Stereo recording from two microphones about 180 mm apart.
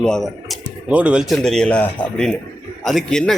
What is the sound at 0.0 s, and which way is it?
Speech, centre (ahead or behind).